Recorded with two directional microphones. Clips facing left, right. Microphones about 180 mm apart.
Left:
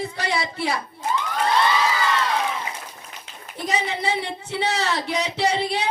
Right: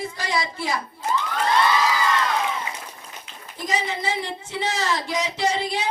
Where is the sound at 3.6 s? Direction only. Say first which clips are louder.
Left 1 dB; 65° left (ahead or behind).